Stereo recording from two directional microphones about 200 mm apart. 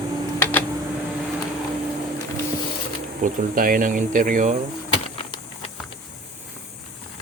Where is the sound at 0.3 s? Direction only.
10° left (ahead or behind).